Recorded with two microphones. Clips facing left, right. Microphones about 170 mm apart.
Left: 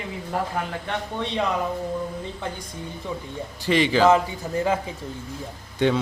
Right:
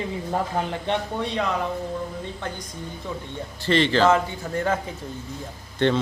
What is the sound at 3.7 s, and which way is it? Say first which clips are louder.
Speech: left 1 dB; 10° left (ahead or behind).